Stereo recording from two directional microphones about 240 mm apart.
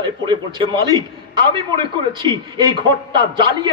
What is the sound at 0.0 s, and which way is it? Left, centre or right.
A man's voice, centre.